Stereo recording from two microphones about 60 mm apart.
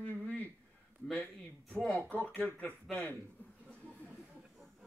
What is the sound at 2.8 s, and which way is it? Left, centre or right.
Speech, centre.